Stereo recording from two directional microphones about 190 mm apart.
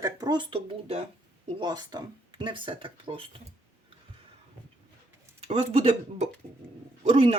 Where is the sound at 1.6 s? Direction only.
20° right (ahead or behind).